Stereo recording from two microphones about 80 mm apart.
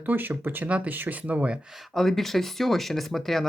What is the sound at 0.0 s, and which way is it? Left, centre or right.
Speech, right.